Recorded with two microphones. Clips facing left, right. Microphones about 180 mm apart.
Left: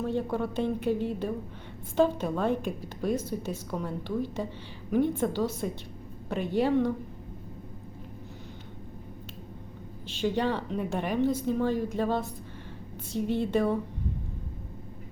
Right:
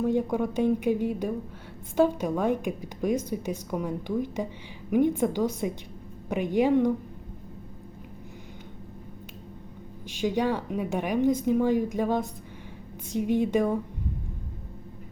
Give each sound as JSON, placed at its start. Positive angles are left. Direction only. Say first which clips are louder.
{"t": 0.0, "sound": "a woman's voice", "louder": "right 4 dB", "side_deg": -15}
{"t": 10.1, "sound": "a woman's voice", "louder": "right 2 dB", "side_deg": -10}